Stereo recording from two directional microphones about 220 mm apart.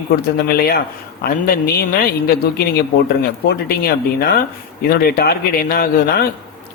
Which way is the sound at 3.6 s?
45° left (ahead or behind).